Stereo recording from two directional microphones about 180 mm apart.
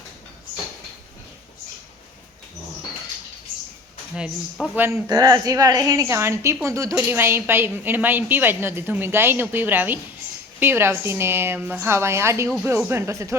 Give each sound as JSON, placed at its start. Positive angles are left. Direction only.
{"t": 4.1, "sound": "a woman's voice", "side_deg": 0}
{"t": 5.0, "sound": "a woman's voice", "side_deg": -20}